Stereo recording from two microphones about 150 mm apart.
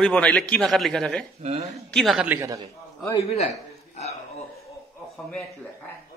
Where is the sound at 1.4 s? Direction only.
45° right (ahead or behind).